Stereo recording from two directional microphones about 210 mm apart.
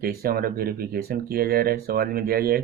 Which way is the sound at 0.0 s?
45° right (ahead or behind).